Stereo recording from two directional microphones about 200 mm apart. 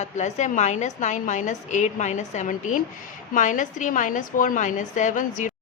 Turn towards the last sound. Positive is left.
turn(degrees=40)  # may be behind; listen again after turning